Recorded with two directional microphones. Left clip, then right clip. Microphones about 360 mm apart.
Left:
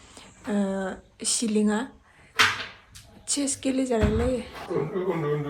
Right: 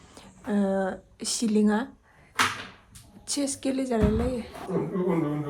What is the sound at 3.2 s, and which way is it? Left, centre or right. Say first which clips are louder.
A woman's voice: left 1 dB; centre.